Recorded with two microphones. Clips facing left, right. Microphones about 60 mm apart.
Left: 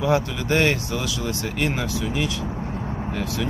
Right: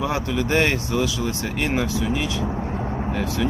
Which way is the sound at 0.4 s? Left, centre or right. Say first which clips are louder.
Right 3 dB; centre.